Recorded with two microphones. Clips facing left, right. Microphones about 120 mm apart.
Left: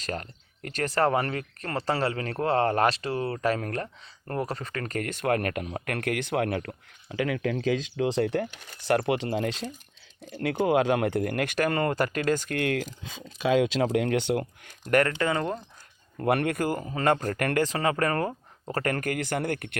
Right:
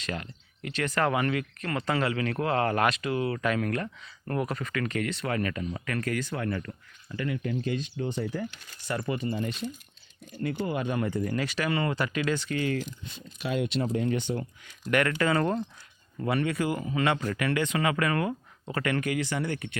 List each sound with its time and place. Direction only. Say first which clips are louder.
0.0 s speech: left 1 dB; 40° left (ahead or behind); by 12.9 s 65° left (ahead or behind)
13.5 s speech: left 6 dB; 90° left; by 14.7 s 70° left (ahead or behind)
14.7 s speech: left 3 dB; 40° left (ahead or behind)
15.1 s speech: right 1 dB; 20° left (ahead or behind)
16.2 s speech: left 2 dB; 60° left (ahead or behind)
17.7 s speech: left 1 dB; 35° left (ahead or behind); by 19.8 s 55° left (ahead or behind)